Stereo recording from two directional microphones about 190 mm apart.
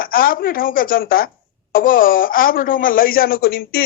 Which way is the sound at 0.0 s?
50° left (ahead or behind).